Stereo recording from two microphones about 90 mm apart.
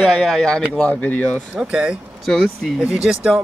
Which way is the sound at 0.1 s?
5° left (ahead or behind).